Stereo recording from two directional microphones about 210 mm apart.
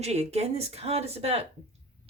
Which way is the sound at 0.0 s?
30° right (ahead or behind).